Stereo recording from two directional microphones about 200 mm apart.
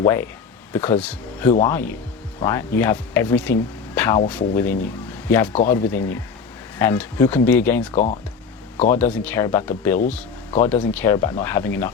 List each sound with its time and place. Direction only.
0.0 s speech: 10° left (ahead or behind)
7.9 s speech: 35° left (ahead or behind)
8.9 s speech: 10° left (ahead or behind)